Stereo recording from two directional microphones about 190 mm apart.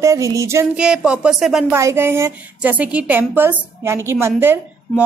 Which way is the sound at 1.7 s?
15° right (ahead or behind).